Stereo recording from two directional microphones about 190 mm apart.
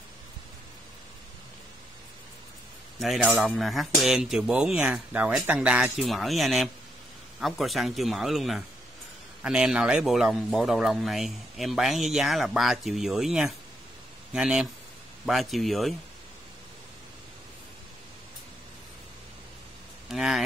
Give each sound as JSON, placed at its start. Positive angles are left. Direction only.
{"t": 3.0, "sound": "speech", "side_deg": 0}
{"t": 20.1, "sound": "speech", "side_deg": 0}